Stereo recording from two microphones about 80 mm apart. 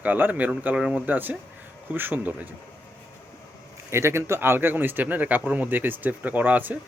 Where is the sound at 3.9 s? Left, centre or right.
Right.